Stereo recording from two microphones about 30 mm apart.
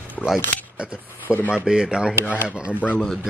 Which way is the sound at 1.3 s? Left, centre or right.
Left.